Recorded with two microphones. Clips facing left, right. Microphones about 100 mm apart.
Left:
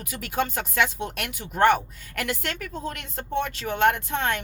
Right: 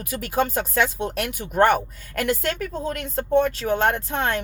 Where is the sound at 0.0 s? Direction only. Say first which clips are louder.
Right 4 dB; 40° right (ahead or behind).